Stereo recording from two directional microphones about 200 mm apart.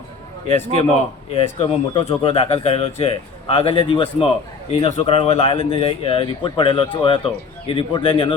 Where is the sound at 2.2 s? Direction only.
30° left (ahead or behind).